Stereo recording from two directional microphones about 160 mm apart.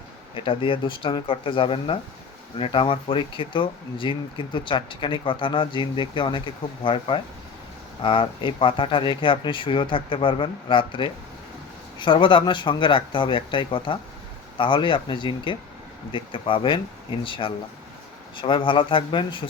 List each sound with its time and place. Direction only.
0.3 s speech: 30° left (ahead or behind)